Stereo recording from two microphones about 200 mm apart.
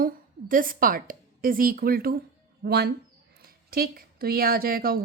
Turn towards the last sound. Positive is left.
turn(degrees=-45)  # may be behind; listen again after turning